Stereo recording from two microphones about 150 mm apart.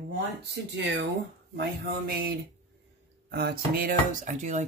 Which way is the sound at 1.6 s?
90° right.